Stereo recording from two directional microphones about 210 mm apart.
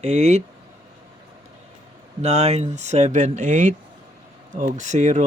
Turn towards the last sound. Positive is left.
turn(degrees=-35)  # may be behind; listen again after turning